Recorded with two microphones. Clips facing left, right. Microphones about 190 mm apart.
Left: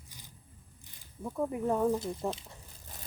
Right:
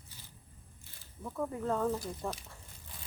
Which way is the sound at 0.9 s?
15° left (ahead or behind).